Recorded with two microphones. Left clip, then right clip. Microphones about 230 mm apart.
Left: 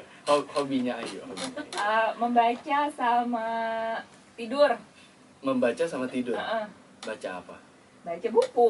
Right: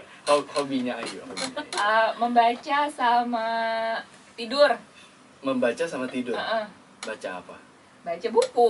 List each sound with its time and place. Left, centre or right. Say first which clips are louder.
0.3 s a man's voice: right 2 dB; centre